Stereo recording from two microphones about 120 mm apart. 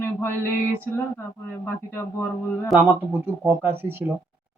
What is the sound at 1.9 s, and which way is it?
Speech, 20° left (ahead or behind).